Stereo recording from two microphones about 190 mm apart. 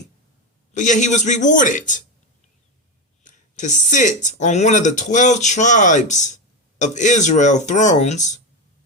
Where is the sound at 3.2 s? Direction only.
40° left (ahead or behind).